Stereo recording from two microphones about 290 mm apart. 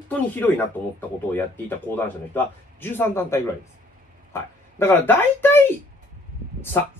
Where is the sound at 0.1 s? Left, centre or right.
Centre.